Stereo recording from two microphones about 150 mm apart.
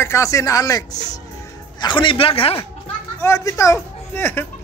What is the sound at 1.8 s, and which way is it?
Speech, 30° left (ahead or behind).